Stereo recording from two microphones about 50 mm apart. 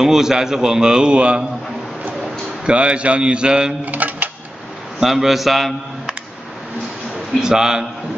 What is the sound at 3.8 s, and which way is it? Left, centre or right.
Cash register, right.